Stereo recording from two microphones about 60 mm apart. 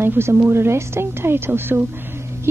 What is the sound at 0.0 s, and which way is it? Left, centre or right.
A woman's voice, right.